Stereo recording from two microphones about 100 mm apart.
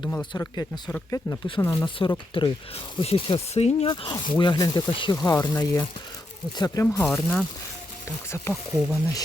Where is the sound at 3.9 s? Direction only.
55° left (ahead or behind).